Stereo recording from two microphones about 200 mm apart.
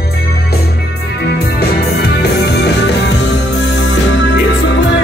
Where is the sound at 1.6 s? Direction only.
55° left (ahead or behind).